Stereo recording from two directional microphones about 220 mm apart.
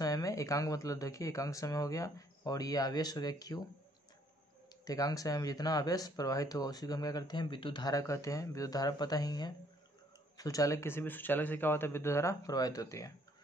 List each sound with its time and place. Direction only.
0.0 s speech: 15° left (ahead or behind)
4.8 s speech: 15° left (ahead or behind)